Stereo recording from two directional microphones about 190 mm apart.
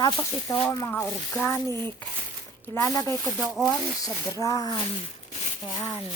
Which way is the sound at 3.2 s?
Centre (ahead or behind).